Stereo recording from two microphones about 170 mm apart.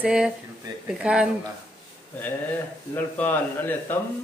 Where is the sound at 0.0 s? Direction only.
5° right (ahead or behind).